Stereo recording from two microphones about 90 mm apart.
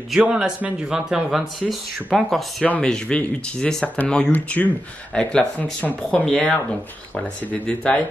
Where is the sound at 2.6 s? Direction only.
10° left (ahead or behind).